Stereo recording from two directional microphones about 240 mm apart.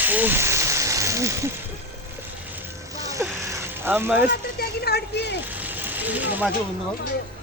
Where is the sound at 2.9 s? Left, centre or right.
Centre.